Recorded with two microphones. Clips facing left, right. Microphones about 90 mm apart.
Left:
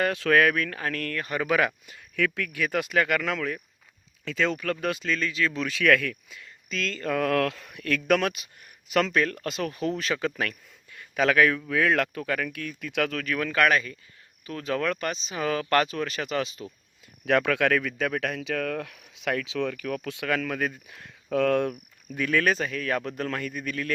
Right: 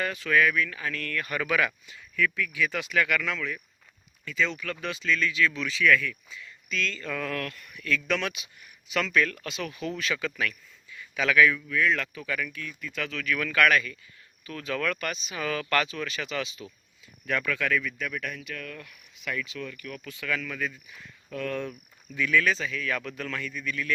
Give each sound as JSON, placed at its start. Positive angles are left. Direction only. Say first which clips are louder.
{"t": 0.0, "sound": "speech", "louder": "left 3 dB", "side_deg": 65}
{"t": 2.1, "sound": "speech", "louder": "even", "side_deg": 70}
{"t": 5.7, "sound": "speech", "louder": "left 3 dB", "side_deg": 65}
{"t": 6.7, "sound": "speech", "louder": "left 3 dB", "side_deg": 40}
{"t": 7.3, "sound": "speech", "louder": "left 9 dB", "side_deg": 90}
{"t": 11.7, "sound": "speech", "louder": "left 3 dB", "side_deg": 70}
{"t": 13.1, "sound": "speech", "louder": "left 2 dB", "side_deg": 40}
{"t": 17.2, "sound": "speech", "louder": "left 6 dB", "side_deg": 70}